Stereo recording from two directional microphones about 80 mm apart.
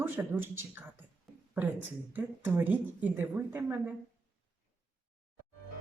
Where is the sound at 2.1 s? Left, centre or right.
Right.